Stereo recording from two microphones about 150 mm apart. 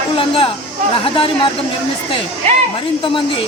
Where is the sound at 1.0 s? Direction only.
35° left (ahead or behind).